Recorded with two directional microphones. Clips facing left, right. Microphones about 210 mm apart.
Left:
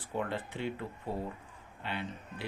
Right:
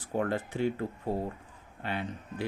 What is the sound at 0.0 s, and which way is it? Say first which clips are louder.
Speech: right 5 dB; 45° right (ahead or behind).